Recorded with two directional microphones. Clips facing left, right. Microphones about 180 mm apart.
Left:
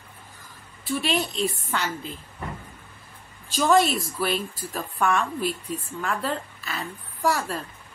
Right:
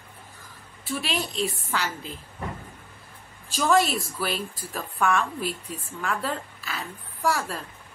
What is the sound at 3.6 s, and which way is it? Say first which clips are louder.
Speech: left 2 dB; centre (ahead or behind).